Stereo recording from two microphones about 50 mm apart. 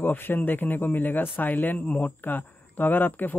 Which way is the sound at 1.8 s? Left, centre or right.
Left.